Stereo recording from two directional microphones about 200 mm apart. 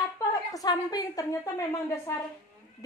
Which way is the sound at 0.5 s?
20° left (ahead or behind).